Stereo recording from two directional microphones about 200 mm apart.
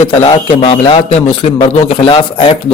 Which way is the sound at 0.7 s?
25° left (ahead or behind).